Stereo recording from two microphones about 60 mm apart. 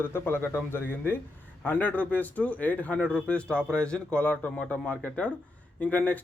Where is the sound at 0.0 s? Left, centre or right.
Left.